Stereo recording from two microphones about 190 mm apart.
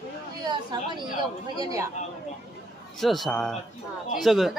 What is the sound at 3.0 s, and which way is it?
A man's voice, centre (ahead or behind).